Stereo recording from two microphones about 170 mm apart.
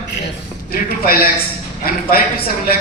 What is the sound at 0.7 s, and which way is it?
Speech, 60° left (ahead or behind).